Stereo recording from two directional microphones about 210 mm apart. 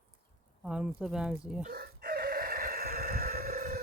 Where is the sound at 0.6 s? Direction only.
5° right (ahead or behind).